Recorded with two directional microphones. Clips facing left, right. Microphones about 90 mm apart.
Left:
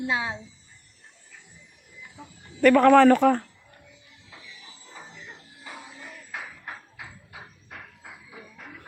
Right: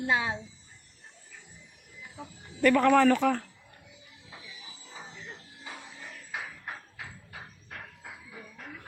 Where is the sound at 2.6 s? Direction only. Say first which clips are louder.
Left 6 dB; 55° left (ahead or behind).